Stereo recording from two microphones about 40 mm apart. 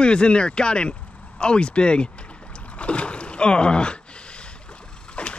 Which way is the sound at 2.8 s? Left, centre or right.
Left.